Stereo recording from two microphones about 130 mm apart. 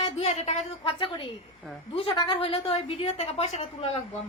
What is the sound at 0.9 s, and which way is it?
A woman's voice, 40° left (ahead or behind).